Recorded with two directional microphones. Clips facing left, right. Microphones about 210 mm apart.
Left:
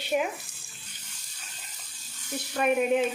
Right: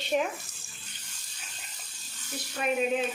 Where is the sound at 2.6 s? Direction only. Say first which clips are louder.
Left 4 dB; 60° left (ahead or behind).